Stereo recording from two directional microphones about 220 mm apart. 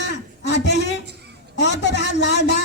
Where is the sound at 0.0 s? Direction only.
50° left (ahead or behind).